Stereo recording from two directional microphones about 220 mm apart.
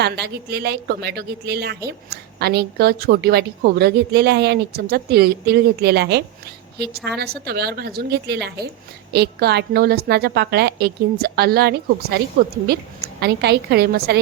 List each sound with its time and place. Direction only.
0.0 s a woman's voice: 45° right (ahead or behind)